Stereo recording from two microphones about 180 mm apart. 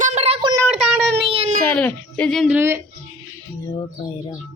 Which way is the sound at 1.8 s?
10° left (ahead or behind).